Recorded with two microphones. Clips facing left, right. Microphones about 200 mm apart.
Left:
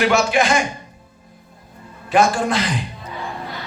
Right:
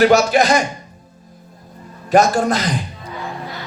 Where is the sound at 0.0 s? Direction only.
40° right (ahead or behind).